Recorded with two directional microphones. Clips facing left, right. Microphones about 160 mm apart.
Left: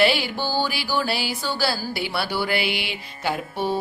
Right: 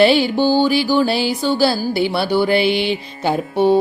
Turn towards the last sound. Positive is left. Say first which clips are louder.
# right 10 dB
turn(degrees=-25)  # may be behind; listen again after turning